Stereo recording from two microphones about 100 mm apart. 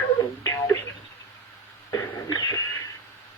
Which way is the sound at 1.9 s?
35° left (ahead or behind).